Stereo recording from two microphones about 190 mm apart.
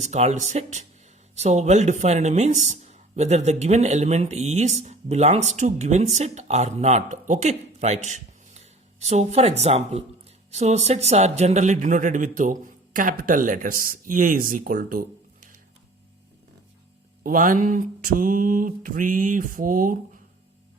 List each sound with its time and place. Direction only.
0.0 s speech: 35° right (ahead or behind)
17.2 s speech: 45° right (ahead or behind)